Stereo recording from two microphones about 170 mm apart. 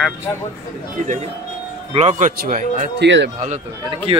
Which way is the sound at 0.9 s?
45° right (ahead or behind).